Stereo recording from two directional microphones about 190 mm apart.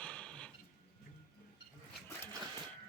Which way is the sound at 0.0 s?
5° left (ahead or behind).